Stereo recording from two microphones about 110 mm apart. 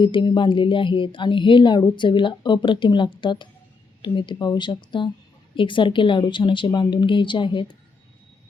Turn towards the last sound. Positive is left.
turn(degrees=45)  # may be behind; listen again after turning